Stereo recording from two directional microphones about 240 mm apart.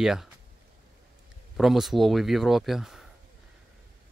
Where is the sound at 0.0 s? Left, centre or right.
Centre.